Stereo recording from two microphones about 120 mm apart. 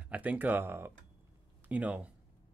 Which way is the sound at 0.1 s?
15° right (ahead or behind).